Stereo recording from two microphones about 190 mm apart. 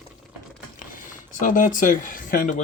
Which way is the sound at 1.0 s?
45° left (ahead or behind).